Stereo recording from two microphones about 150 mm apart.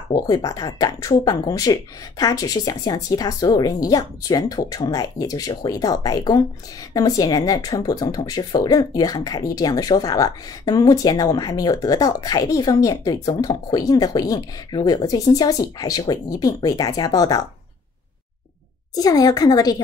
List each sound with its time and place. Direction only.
0.1 s speech: 25° left (ahead or behind)
18.9 s speech: 25° left (ahead or behind)